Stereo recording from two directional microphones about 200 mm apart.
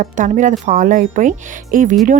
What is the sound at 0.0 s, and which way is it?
Speech, 40° right (ahead or behind).